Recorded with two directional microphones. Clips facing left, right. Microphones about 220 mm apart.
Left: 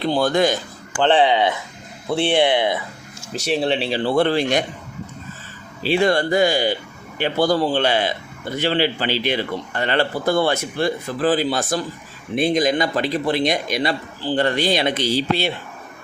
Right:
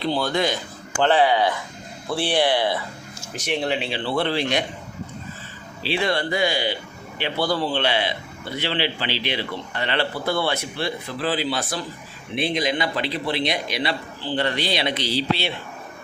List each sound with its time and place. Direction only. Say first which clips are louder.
0.0 s speech: left 5 dB; 50° left (ahead or behind)
1.0 s speech: left 2 dB; 25° left (ahead or behind); by 4.6 s 45° left (ahead or behind)
5.8 s speech: left 6 dB; 45° left (ahead or behind)